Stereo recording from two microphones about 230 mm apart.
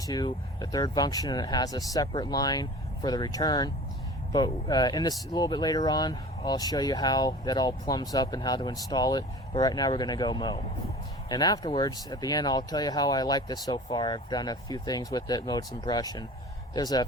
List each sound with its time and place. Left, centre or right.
0.0 s speech: centre